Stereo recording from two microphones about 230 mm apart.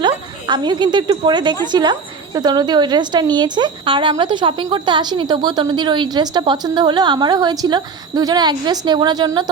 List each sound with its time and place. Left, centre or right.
0.0 s a woman's voice: centre